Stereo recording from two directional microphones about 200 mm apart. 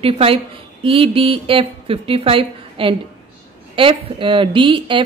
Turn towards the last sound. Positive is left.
turn(degrees=-25)  # may be behind; listen again after turning